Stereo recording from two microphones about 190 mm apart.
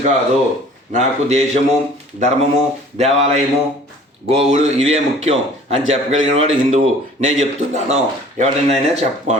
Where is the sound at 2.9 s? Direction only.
35° right (ahead or behind).